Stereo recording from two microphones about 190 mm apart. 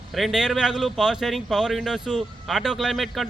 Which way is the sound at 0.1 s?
Centre (ahead or behind).